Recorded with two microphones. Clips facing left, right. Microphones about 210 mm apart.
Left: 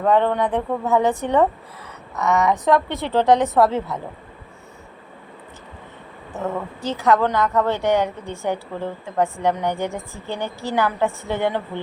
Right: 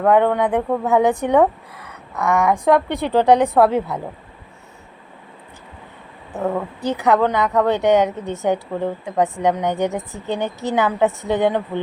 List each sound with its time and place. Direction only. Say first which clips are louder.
0.0 s speech: right 3 dB; 10° right (ahead or behind)
6.3 s a woman's voice: right 4 dB; 15° right (ahead or behind)